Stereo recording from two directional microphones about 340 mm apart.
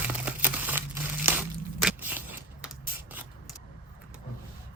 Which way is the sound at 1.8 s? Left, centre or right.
Centre.